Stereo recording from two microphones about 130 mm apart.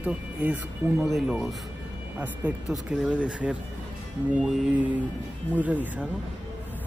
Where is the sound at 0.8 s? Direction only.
25° right (ahead or behind).